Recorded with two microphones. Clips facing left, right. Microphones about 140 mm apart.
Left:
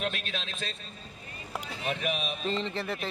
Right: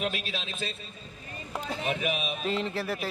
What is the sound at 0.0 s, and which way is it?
A man's voice, 5° right (ahead or behind).